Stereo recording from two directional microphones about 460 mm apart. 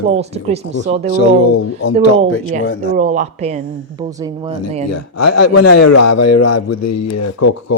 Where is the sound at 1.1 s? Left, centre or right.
Left.